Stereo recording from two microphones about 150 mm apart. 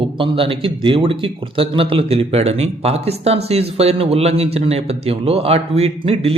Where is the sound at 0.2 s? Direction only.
35° right (ahead or behind).